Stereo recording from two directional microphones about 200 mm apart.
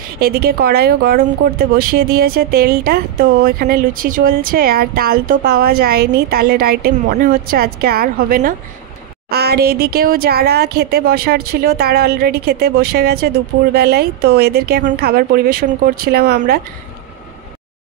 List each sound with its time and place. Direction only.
0.2 s speech: 50° right (ahead or behind)